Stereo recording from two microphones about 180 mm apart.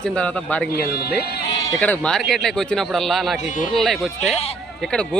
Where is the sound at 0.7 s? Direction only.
60° left (ahead or behind).